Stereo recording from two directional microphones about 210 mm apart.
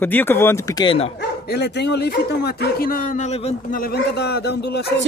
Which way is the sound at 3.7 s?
45° left (ahead or behind).